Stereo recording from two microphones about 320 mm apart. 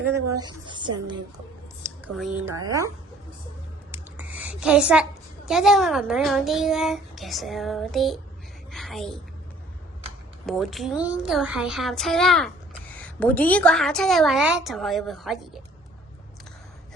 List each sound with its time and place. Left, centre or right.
0.3 s a woman's voice: centre
2.1 s a woman's voice: centre
3.9 s a sound: centre
5.5 s a child's voice: centre
8.7 s a sound: centre
10.4 s a child's voice: centre